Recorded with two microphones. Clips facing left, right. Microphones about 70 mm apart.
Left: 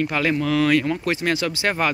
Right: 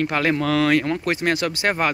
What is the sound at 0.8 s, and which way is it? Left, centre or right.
Speech, right.